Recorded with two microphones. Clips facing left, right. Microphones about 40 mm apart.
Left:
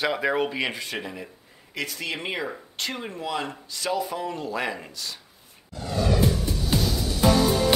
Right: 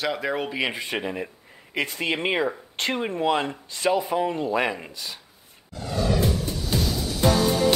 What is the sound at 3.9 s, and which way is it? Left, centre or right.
Speech, right.